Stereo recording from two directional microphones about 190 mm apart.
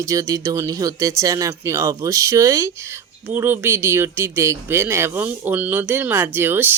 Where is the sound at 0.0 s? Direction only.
15° right (ahead or behind).